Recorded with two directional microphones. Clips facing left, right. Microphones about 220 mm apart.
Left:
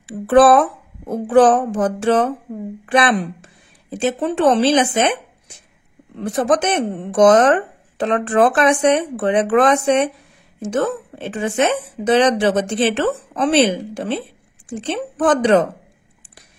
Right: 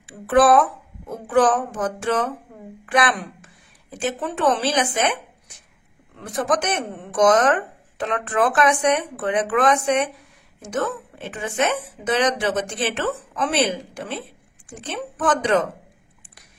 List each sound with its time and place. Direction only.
0.0 s a sound: 30° left (ahead or behind)
1.3 s speech: 30° left (ahead or behind)
6.1 s a woman's voice: 30° left (ahead or behind)